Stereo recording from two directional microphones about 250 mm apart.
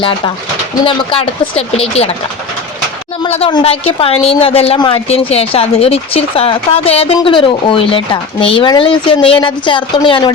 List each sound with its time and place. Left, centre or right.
0.9 s a woman's voice: left
3.2 s a woman's voice: left